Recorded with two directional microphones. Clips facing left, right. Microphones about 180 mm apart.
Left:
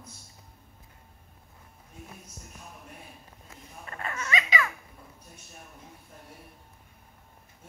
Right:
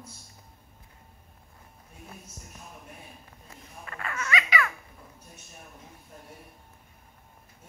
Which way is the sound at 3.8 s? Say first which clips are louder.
Right 1 dB; 30° left (ahead or behind).